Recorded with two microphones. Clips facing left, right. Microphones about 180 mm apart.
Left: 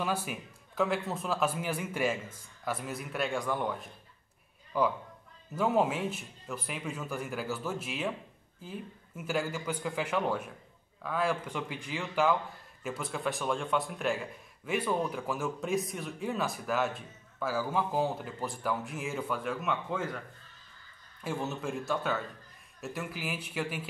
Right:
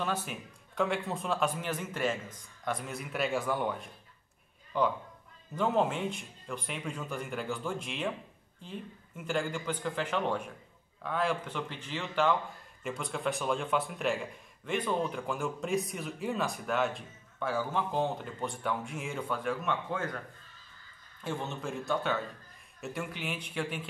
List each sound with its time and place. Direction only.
0.0 s speech: 10° left (ahead or behind)
21.2 s speech: 5° left (ahead or behind)